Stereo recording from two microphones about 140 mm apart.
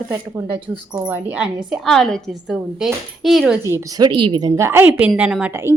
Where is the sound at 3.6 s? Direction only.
25° right (ahead or behind).